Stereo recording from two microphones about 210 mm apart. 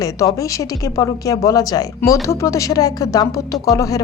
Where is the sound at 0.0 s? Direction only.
15° left (ahead or behind).